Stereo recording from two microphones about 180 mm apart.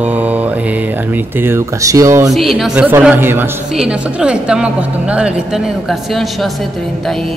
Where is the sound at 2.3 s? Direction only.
Centre (ahead or behind).